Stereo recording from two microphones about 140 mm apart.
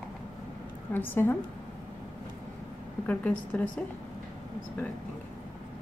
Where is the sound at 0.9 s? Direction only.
15° left (ahead or behind).